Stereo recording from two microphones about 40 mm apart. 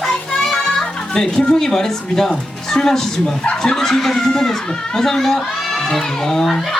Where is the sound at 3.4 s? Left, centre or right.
Left.